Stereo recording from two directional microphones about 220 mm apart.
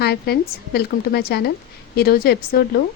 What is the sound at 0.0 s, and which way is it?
Speech, 45° left (ahead or behind).